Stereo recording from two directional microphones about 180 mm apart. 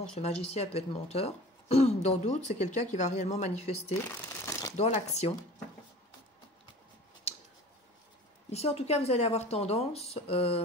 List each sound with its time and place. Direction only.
0.2 s speech: 35° left (ahead or behind)
4.0 s crumpling: 15° left (ahead or behind)
4.7 s speech: 35° left (ahead or behind)
8.5 s speech: 35° left (ahead or behind)